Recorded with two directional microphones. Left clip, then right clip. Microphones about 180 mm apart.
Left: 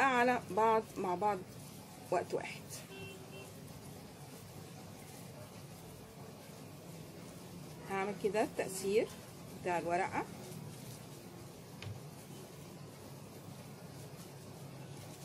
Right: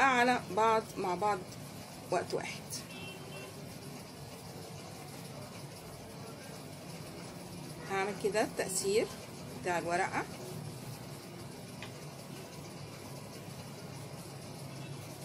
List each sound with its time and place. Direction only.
0.0 s speech: 20° left (ahead or behind)
7.9 s speech: 20° left (ahead or behind)